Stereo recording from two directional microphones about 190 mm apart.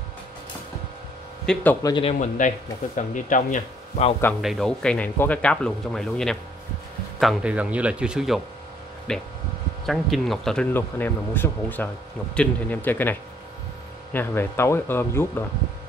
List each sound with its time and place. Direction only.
1.4 s speech: 5° left (ahead or behind)
2.0 s a man's voice: 40° left (ahead or behind)
4.4 s speech: centre (ahead or behind)